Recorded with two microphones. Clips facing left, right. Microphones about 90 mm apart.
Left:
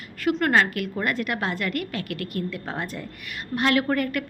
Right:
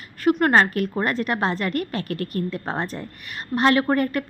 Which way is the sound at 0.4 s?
35° right (ahead or behind).